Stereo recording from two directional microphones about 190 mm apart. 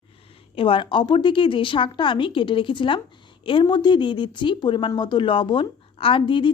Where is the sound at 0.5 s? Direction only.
25° left (ahead or behind).